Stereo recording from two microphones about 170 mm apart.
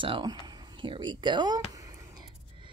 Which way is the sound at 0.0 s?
30° right (ahead or behind).